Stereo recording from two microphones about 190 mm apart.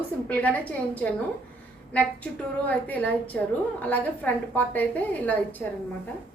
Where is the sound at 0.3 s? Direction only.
10° left (ahead or behind).